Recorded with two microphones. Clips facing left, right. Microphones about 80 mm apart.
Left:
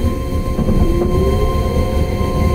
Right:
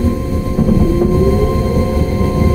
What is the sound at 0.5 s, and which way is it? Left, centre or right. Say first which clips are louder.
Thunder: right 4 dB; centre.